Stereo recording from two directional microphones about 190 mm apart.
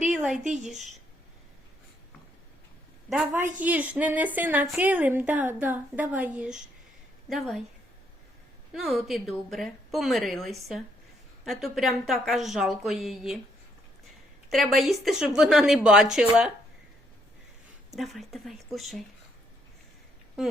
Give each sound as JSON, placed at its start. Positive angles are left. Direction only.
{"t": 0.1, "sound": "speech", "side_deg": -5}
{"t": 3.3, "sound": "a woman's voice", "side_deg": -10}
{"t": 8.7, "sound": "a woman's voice", "side_deg": 0}
{"t": 14.5, "sound": "a woman's voice", "side_deg": 0}
{"t": 17.9, "sound": "a woman's voice", "side_deg": 0}